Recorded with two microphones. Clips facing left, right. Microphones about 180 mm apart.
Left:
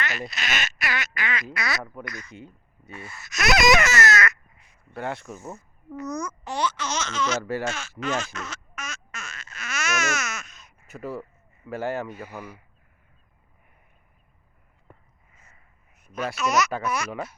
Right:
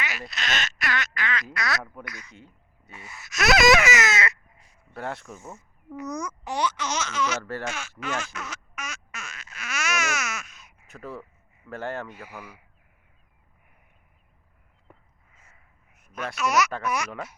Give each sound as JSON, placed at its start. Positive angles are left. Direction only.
{"t": 0.0, "sound": "speech", "side_deg": -5}
{"t": 2.0, "sound": "speech", "side_deg": -10}
{"t": 3.9, "sound": "crow", "side_deg": -25}
{"t": 4.9, "sound": "speech", "side_deg": 0}
{"t": 6.0, "sound": "speech", "side_deg": -15}
{"t": 7.6, "sound": "quack", "side_deg": -10}
{"t": 10.8, "sound": "speech", "side_deg": 5}
{"t": 12.3, "sound": "speech", "side_deg": -10}
{"t": 16.4, "sound": "speech", "side_deg": -10}